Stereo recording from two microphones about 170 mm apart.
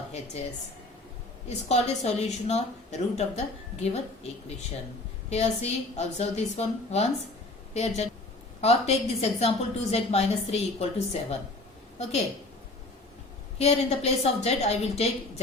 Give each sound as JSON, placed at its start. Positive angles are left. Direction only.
{"t": 1.5, "sound": "a woman's voice", "side_deg": 40}
{"t": 13.6, "sound": "a woman's voice", "side_deg": 35}